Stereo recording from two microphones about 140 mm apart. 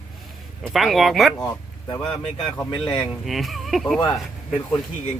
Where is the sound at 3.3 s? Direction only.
Centre (ahead or behind).